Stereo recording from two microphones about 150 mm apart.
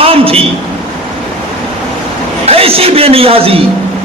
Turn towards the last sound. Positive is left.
turn(degrees=-40)  # may be behind; listen again after turning